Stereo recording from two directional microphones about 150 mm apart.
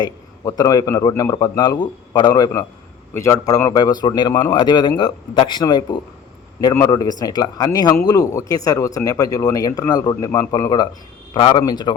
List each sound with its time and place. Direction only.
0.0 s speech: 25° left (ahead or behind)